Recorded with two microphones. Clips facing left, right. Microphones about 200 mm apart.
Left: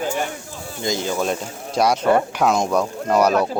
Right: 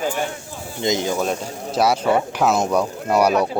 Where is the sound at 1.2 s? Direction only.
5° right (ahead or behind).